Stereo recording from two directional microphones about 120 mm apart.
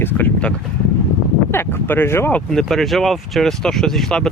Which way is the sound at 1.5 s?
20° left (ahead or behind).